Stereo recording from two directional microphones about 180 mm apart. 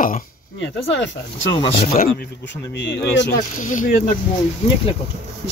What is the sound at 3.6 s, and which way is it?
Speech, 45° left (ahead or behind).